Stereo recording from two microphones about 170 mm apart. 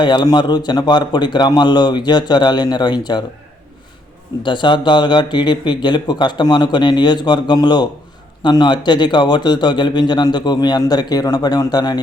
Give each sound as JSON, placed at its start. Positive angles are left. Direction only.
{"t": 0.0, "sound": "a man's voice", "side_deg": 25}
{"t": 4.4, "sound": "a man's voice", "side_deg": 30}